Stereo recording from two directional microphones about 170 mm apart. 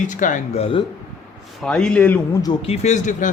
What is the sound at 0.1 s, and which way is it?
Speech, 50° left (ahead or behind).